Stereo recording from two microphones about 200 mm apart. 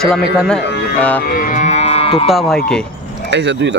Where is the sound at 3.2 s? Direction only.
60° right (ahead or behind).